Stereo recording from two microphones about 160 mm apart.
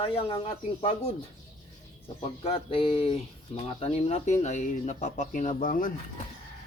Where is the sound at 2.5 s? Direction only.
35° left (ahead or behind).